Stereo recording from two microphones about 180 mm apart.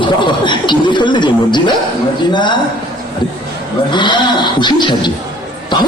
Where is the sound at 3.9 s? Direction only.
25° left (ahead or behind).